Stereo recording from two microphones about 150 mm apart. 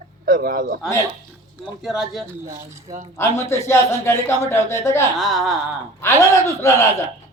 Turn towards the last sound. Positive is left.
turn(degrees=20)  # may be behind; listen again after turning